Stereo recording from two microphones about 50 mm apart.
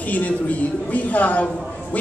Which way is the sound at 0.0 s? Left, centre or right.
Left.